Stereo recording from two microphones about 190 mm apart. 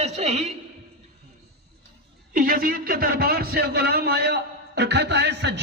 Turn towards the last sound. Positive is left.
turn(degrees=-65)  # may be behind; listen again after turning